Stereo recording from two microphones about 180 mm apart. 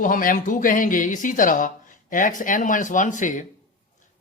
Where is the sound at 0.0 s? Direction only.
50° left (ahead or behind).